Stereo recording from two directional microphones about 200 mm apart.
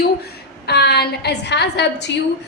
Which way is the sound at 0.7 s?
55° left (ahead or behind).